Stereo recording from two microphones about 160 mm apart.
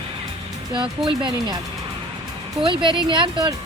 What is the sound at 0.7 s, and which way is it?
Speech, 30° right (ahead or behind).